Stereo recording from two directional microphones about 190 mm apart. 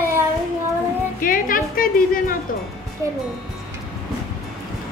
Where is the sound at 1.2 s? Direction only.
45° left (ahead or behind).